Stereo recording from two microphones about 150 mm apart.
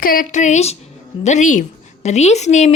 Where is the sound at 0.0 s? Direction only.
70° left (ahead or behind).